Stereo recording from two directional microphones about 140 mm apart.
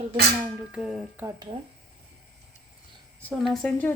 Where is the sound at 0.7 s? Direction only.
Centre (ahead or behind).